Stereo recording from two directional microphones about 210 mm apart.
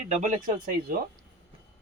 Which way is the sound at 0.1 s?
35° right (ahead or behind).